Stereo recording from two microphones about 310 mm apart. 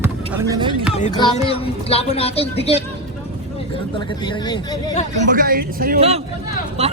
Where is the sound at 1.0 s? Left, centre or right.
Centre.